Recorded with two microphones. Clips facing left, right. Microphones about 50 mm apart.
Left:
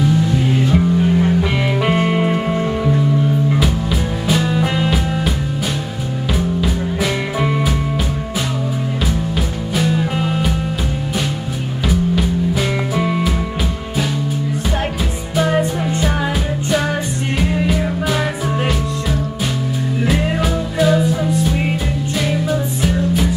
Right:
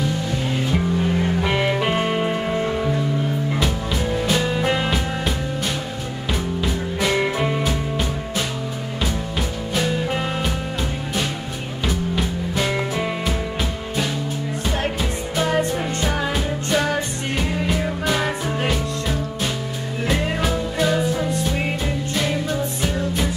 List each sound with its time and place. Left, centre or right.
0.7 s music: centre
6.6 s music: centre
9.8 s music: centre
11.9 s music: centre
15.3 s music: centre
17.4 s music: centre
20.1 s music: centre